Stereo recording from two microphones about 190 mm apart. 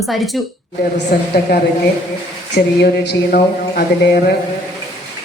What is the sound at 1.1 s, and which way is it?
Speech, 55° left (ahead or behind).